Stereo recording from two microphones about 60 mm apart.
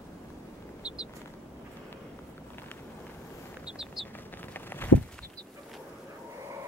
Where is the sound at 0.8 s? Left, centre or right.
Centre.